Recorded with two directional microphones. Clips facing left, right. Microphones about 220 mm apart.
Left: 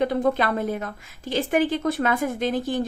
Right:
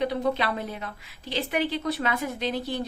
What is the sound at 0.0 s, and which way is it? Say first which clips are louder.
A woman's voice: left 4 dB; 50° left (ahead or behind).